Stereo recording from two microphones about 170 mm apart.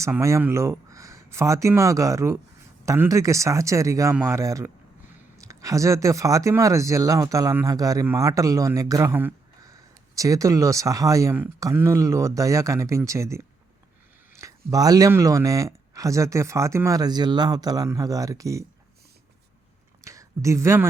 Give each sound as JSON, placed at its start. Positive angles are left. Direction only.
{"t": 0.0, "sound": "speech", "side_deg": -15}
{"t": 20.1, "sound": "speech", "side_deg": -20}